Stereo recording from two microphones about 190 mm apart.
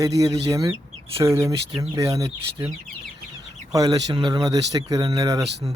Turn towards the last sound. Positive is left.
turn(degrees=-20)  # may be behind; listen again after turning